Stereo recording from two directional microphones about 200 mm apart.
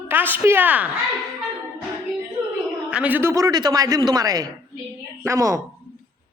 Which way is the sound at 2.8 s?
5° right (ahead or behind).